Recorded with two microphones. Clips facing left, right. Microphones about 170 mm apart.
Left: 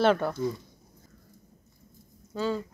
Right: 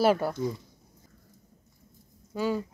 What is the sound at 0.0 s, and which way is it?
Speech, 5° right (ahead or behind).